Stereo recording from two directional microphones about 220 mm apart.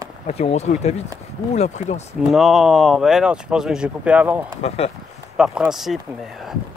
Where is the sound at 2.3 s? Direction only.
Centre (ahead or behind).